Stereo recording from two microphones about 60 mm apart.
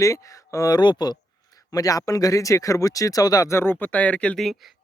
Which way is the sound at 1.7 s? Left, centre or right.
Left.